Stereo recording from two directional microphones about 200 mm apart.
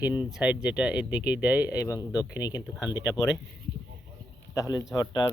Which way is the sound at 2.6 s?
5° right (ahead or behind).